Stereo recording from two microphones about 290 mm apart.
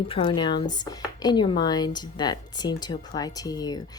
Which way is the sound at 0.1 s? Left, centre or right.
Centre.